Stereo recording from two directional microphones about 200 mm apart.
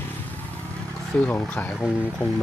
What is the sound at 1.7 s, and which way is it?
Speech, 5° right (ahead or behind).